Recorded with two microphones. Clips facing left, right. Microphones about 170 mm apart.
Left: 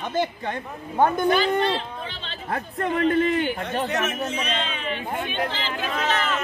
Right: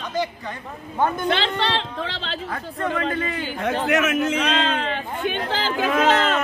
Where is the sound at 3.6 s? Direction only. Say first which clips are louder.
Right 5 dB; 90° right.